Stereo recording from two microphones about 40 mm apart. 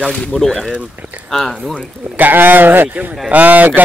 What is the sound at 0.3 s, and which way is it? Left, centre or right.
Speech, centre.